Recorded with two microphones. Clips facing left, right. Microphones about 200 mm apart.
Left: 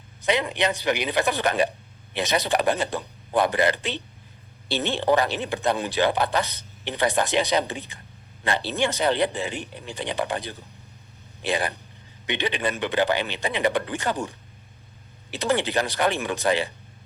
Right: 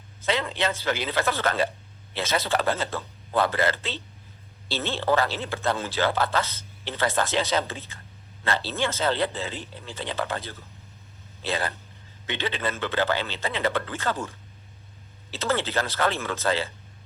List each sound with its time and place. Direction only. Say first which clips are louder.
0.2 s speech: left 3 dB; 15° left (ahead or behind)